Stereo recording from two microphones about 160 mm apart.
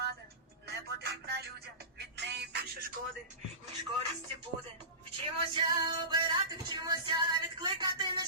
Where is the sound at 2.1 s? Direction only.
90° right.